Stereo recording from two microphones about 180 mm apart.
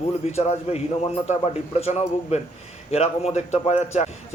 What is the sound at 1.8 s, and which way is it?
A man's voice, 35° left (ahead or behind).